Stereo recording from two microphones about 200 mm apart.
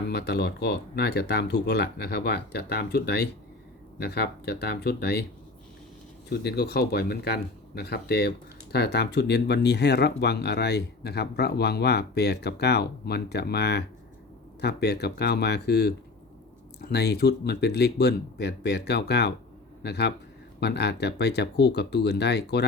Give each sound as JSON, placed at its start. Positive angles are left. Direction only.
{"t": 0.1, "sound": "speech", "side_deg": 55}
{"t": 6.2, "sound": "speech", "side_deg": 55}